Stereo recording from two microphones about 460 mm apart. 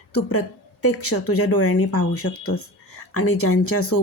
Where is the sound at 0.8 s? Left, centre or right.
Left.